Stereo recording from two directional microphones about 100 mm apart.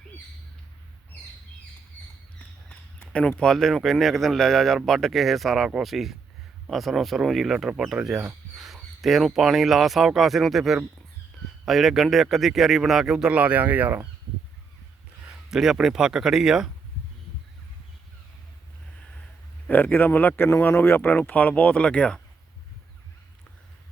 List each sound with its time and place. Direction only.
2.6 s speech: 10° left (ahead or behind); by 14.1 s 15° right (ahead or behind)
15.4 s speech: 5° right (ahead or behind)
19.6 s speech: 15° left (ahead or behind)